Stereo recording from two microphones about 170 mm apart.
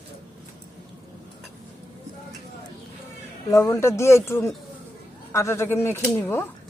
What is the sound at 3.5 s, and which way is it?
Speech, 15° left (ahead or behind).